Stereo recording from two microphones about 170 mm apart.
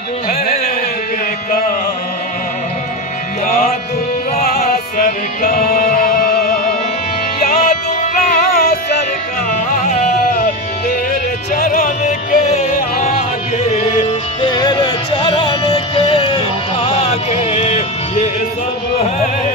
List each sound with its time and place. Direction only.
3.4 s music: 55° left (ahead or behind)
11.5 s music: 60° left (ahead or behind)
14.4 s music: 25° left (ahead or behind)